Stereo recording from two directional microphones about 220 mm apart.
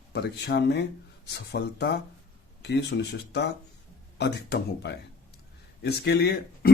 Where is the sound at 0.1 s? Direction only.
50° left (ahead or behind).